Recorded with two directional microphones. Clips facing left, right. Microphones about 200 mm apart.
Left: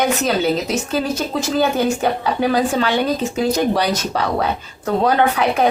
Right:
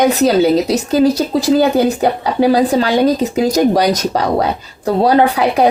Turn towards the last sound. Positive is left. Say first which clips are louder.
# right 4 dB
turn(degrees=-35)  # may be behind; listen again after turning